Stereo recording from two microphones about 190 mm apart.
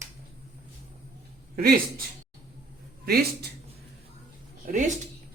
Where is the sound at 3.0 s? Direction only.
55° right (ahead or behind).